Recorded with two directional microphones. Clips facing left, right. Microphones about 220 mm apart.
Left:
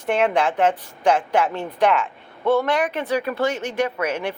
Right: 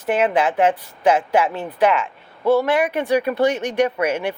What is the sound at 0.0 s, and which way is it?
Speech, 5° right (ahead or behind).